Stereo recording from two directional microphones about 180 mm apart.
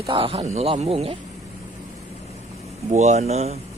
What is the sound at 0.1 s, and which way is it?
Speech, 30° right (ahead or behind).